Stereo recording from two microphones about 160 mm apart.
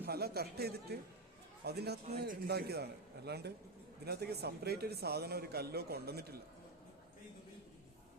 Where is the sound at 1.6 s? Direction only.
90° right.